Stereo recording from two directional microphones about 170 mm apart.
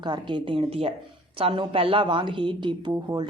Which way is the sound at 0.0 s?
25° right (ahead or behind).